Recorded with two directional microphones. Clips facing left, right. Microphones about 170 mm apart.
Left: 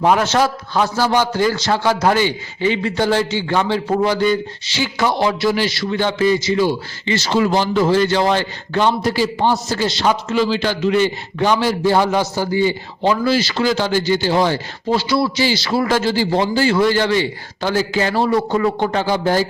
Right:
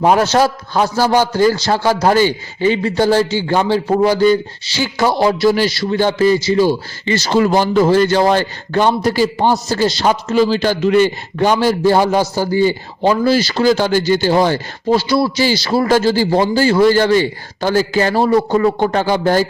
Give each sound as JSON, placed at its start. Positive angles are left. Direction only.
{"t": 0.0, "sound": "a man's voice", "side_deg": -35}